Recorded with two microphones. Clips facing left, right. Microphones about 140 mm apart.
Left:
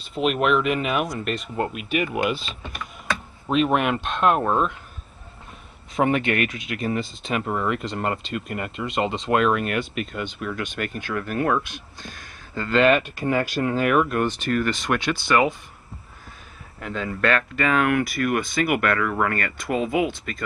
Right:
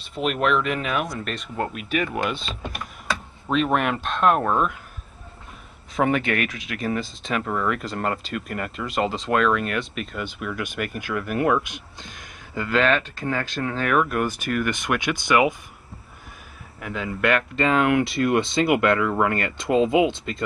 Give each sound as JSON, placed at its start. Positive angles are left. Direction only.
{"t": 0.0, "sound": "speech", "side_deg": 0}
{"t": 5.9, "sound": "speech", "side_deg": 0}
{"t": 7.4, "sound": "speech", "side_deg": 15}
{"t": 7.7, "sound": "speech", "side_deg": 0}
{"t": 12.6, "sound": "speech", "side_deg": 0}
{"t": 12.9, "sound": "speech", "side_deg": 15}
{"t": 14.0, "sound": "speech", "side_deg": -5}
{"t": 16.8, "sound": "speech", "side_deg": -10}